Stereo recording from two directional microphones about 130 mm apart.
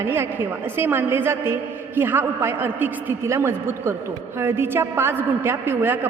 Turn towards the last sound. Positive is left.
turn(degrees=-15)  # may be behind; listen again after turning